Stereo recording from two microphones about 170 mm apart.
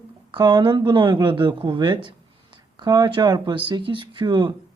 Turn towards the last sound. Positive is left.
turn(degrees=-25)  # may be behind; listen again after turning